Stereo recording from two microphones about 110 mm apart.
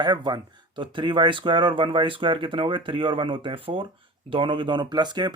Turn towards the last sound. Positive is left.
turn(degrees=-40)  # may be behind; listen again after turning